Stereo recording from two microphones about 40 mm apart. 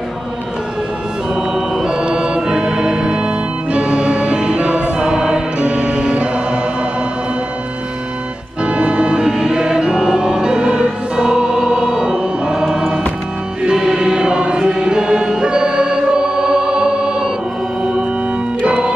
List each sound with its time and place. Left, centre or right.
1.3 s organ: centre
8.6 s choir: right
13.7 s music: centre
18.7 s music: right